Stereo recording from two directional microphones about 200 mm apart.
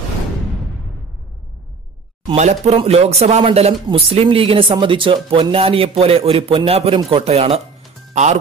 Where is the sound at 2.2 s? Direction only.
35° right (ahead or behind).